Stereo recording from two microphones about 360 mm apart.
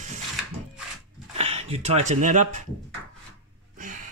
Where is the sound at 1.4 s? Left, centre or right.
Centre.